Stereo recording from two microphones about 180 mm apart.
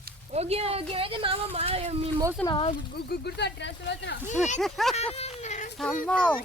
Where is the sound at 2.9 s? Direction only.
65° left (ahead or behind).